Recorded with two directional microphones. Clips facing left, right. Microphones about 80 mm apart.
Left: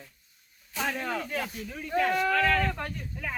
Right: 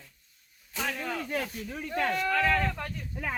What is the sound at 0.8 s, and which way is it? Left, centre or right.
Speech, centre.